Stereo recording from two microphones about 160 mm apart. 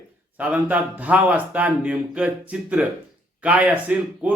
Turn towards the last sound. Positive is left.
turn(degrees=-10)  # may be behind; listen again after turning